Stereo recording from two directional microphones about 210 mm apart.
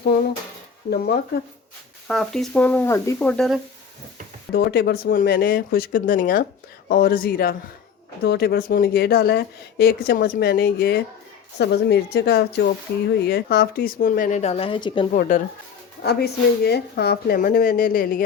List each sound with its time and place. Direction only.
0.9 s speech: 50° left (ahead or behind)
2.0 s speech: centre (ahead or behind)
4.5 s speech: 50° left (ahead or behind); by 15.0 s 25° left (ahead or behind)
15.1 s speech: 35° left (ahead or behind)
16.0 s speech: 50° left (ahead or behind)